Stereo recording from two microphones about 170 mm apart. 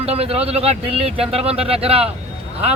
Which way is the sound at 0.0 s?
35° right (ahead or behind).